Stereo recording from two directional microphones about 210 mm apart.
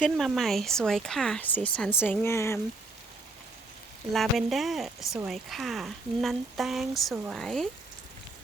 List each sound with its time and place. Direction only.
0.0 s speech: centre (ahead or behind)
4.1 s speech: centre (ahead or behind)